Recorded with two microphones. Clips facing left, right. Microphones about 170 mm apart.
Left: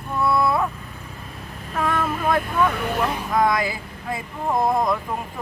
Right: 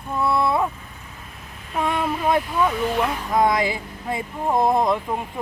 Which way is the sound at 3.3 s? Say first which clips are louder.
Right 2 dB; 25° right (ahead or behind).